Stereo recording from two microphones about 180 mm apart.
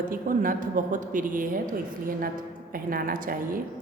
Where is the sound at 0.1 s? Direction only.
50° right (ahead or behind).